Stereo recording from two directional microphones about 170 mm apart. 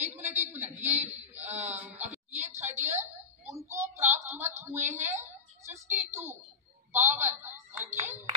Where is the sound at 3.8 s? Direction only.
45° right (ahead or behind).